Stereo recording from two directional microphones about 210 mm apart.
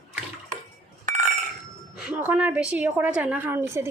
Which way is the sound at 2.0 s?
5° right (ahead or behind).